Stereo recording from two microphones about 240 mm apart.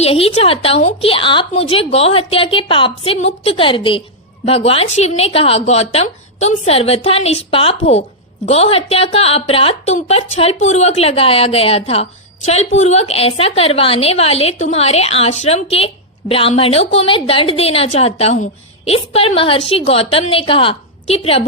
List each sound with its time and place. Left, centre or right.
0.0 s a woman's voice: left